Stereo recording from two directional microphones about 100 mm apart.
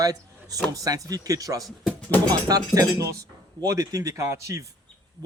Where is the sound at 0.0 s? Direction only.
35° right (ahead or behind).